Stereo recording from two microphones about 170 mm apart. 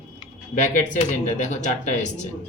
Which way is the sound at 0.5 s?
45° left (ahead or behind).